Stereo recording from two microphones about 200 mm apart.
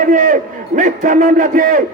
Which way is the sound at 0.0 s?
40° right (ahead or behind).